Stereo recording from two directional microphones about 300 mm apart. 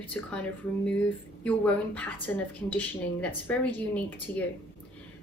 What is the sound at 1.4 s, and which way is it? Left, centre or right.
A woman's voice, centre.